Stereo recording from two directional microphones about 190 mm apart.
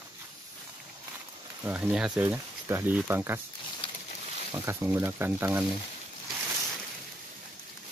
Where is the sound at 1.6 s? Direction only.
5° right (ahead or behind).